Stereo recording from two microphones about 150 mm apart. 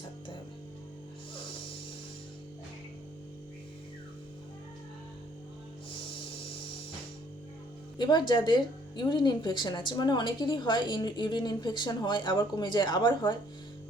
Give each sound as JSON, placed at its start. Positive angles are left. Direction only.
{"t": 7.9, "sound": "speech", "side_deg": 30}